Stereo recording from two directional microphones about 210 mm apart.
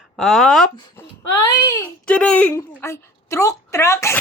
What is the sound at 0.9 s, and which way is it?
A woman's voice, 15° left (ahead or behind).